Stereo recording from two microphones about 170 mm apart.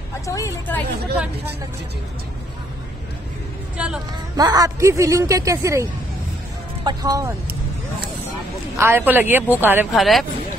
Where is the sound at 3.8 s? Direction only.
5° right (ahead or behind).